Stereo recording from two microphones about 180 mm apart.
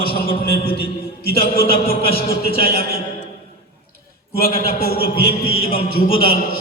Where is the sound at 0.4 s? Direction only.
60° left (ahead or behind).